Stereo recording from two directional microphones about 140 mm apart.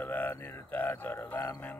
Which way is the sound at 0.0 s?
15° left (ahead or behind).